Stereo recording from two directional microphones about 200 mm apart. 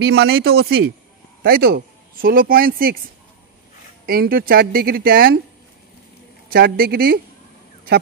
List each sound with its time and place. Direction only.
0.0 s speech: 55° right (ahead or behind)
4.0 s speech: 50° right (ahead or behind)
6.5 s speech: 50° right (ahead or behind)